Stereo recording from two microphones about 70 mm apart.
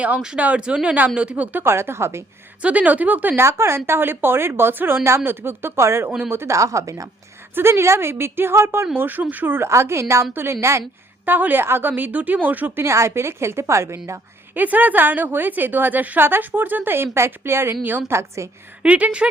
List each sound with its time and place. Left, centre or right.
0.0 s speech: centre
1.5 s a woman's voice: right
2.6 s a woman's voice: centre
3.4 s a woman's voice: right
6.6 s a woman's voice: right
7.5 s a woman's voice: right
9.6 s a woman's voice: right
11.3 s a woman's voice: right
12.8 s a woman's voice: right
14.5 s a woman's voice: right
18.1 s a woman's voice: right
18.8 s speech: centre